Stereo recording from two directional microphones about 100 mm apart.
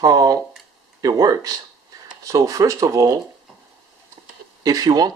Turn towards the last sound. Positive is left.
turn(degrees=-40)  # may be behind; listen again after turning